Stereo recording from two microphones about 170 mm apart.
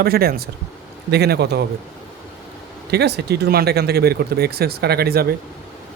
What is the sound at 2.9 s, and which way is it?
Speech, 75° right (ahead or behind).